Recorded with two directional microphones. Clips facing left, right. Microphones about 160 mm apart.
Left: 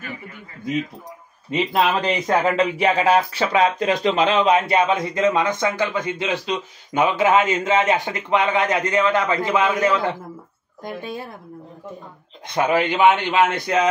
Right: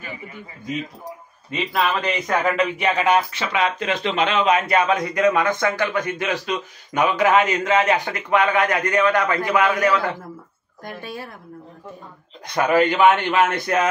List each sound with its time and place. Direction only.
1.5 s speech: 30° left (ahead or behind)
12.5 s speech: 20° left (ahead or behind)